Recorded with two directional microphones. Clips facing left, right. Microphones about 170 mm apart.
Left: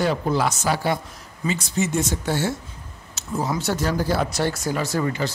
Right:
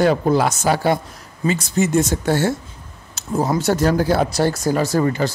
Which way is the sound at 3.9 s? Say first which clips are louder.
Right 5 dB; 60° right (ahead or behind).